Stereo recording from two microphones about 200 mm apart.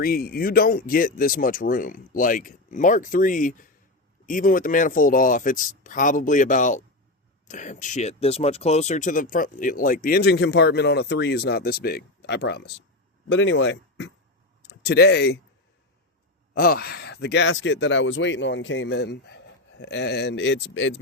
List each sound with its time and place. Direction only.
0.0 s speech: 50° left (ahead or behind)
13.2 s speech: 65° left (ahead or behind)
16.6 s speech: 50° left (ahead or behind); by 21.0 s 65° left (ahead or behind)